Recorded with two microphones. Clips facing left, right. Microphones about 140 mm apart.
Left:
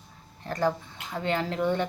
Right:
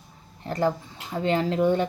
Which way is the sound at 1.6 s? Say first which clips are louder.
Right 4 dB; 10° right (ahead or behind).